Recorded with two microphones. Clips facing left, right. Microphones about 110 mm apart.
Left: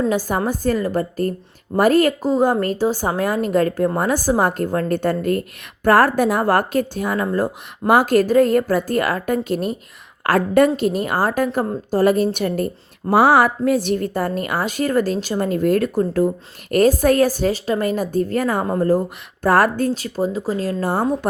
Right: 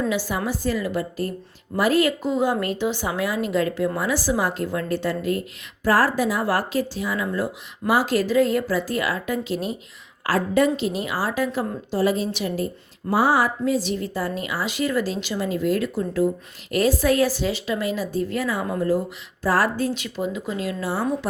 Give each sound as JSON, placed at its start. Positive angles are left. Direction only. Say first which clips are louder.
{"t": 0.1, "sound": "a woman's voice", "louder": "left 5 dB", "side_deg": 45}